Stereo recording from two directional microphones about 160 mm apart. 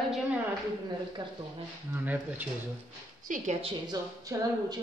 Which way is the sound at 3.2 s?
50° right (ahead or behind).